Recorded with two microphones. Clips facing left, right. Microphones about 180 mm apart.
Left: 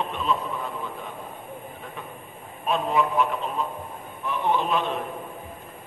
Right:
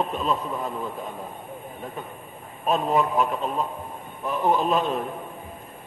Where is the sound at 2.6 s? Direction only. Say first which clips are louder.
Right 2 dB; 40° right (ahead or behind).